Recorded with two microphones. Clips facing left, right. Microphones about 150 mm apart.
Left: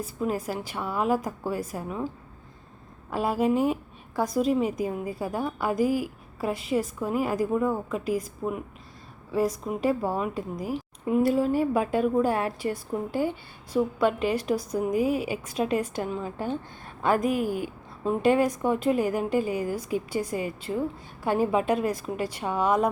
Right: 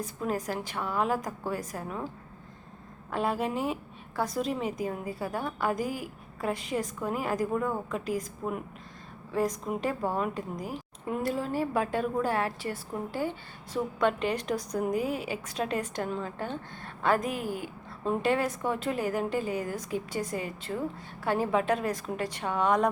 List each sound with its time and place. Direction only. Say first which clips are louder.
0.0 s a woman's voice: left 3 dB; 10° left (ahead or behind)
3.1 s a woman's voice: left 5 dB; 10° left (ahead or behind)